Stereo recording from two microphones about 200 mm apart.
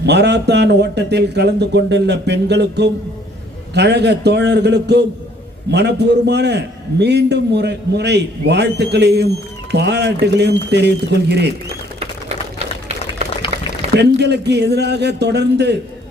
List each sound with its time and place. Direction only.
0.0 s a man's voice: 60° right (ahead or behind)
13.2 s boiling: 30° right (ahead or behind)
13.9 s a man's voice: 55° right (ahead or behind)